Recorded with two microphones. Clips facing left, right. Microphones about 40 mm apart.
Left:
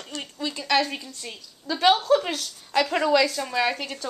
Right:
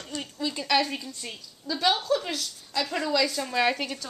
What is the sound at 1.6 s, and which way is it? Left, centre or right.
A woman's voice, left.